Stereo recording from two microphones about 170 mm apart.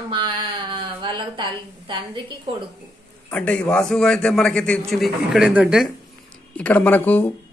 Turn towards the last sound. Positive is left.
turn(degrees=10)  # may be behind; listen again after turning